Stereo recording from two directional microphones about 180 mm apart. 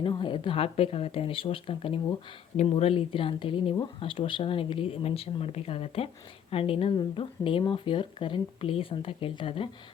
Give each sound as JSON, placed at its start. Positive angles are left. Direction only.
{"t": 0.0, "sound": "speech", "side_deg": 25}